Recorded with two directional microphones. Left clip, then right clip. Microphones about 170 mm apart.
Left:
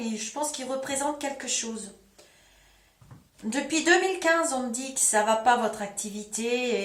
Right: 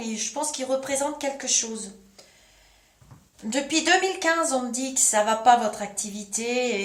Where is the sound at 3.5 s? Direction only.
35° right (ahead or behind).